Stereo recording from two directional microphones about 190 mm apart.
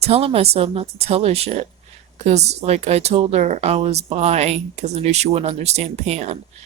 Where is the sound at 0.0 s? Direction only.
30° right (ahead or behind).